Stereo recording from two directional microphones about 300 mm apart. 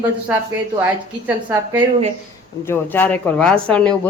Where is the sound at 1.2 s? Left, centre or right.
Centre.